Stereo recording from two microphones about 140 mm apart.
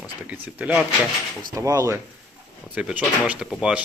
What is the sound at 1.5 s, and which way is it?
Speech, 25° right (ahead or behind).